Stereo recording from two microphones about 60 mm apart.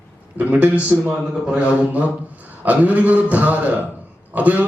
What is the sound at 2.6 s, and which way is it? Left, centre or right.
A man's voice, right.